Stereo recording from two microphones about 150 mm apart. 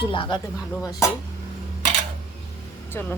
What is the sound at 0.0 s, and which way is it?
Speech, 35° left (ahead or behind).